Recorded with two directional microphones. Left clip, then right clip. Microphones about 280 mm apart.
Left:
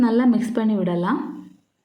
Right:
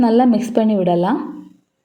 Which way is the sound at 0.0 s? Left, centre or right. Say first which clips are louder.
Right 5 dB; centre.